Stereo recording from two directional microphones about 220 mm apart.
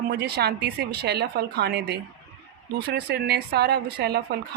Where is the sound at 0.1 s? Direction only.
50° right (ahead or behind).